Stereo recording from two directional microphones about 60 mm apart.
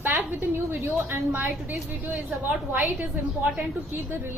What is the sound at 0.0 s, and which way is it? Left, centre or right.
A woman's voice, right.